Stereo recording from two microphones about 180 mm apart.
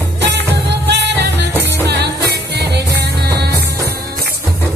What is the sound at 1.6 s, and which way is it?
Music, 70° right (ahead or behind).